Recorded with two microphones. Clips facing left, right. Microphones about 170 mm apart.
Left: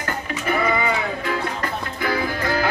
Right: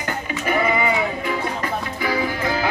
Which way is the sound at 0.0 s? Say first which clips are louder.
Right 1 dB; 10° right (ahead or behind).